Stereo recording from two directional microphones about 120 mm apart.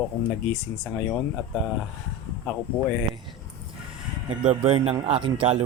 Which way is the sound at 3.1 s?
40° right (ahead or behind).